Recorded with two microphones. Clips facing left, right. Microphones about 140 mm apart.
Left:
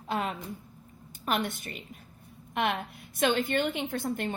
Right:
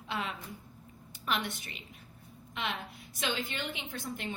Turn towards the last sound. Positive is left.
turn(degrees=50)  # may be behind; listen again after turning